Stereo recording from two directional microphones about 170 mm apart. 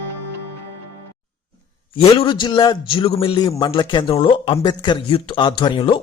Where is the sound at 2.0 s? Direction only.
25° left (ahead or behind).